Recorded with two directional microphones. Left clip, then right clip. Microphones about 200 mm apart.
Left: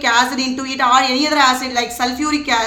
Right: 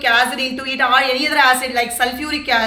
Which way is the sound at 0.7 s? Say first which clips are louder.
Left 1 dB; 55° left (ahead or behind).